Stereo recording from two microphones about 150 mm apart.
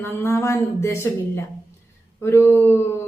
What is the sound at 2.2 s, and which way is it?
Speech, 15° left (ahead or behind).